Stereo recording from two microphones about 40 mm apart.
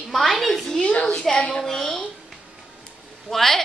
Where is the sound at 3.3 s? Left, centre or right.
Centre.